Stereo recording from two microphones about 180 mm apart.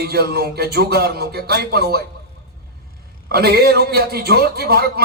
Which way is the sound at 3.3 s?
60° right (ahead or behind).